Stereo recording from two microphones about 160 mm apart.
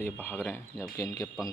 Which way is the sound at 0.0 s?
10° left (ahead or behind).